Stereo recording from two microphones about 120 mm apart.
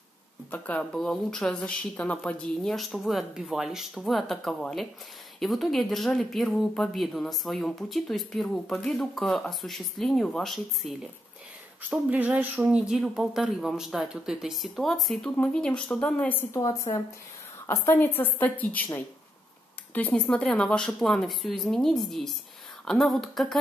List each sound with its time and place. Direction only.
0.5 s speech: 10° left (ahead or behind)
11.9 s a woman's voice: 10° right (ahead or behind); by 16.4 s 10° left (ahead or behind)
16.5 s a woman's voice: 30° left (ahead or behind)
17.6 s a woman's voice: 15° left (ahead or behind)
19.9 s speech: 15° left (ahead or behind)